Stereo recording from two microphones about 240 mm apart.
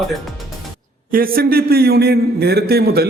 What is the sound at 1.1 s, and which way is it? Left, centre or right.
A man's voice, right.